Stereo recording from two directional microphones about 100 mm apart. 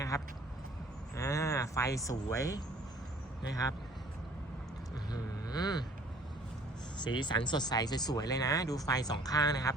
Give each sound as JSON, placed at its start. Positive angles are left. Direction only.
{"t": 0.1, "sound": "speech", "side_deg": 35}
{"t": 5.1, "sound": "vehicle", "side_deg": 40}
{"t": 7.0, "sound": "speech", "side_deg": 50}